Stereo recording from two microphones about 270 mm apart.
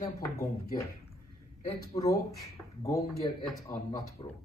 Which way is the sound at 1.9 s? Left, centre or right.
Centre.